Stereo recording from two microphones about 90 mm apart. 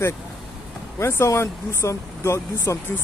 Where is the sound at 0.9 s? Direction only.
30° left (ahead or behind).